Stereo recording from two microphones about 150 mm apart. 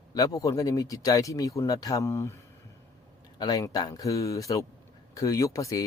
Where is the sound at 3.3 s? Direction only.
25° left (ahead or behind).